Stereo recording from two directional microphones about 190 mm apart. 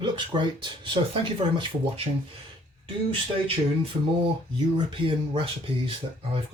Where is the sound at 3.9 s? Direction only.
35° right (ahead or behind).